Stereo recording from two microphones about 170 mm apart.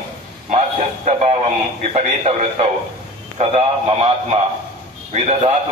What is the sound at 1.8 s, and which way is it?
Speech, 40° right (ahead or behind).